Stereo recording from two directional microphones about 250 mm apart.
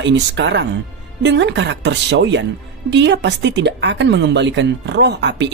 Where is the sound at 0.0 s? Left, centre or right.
Right.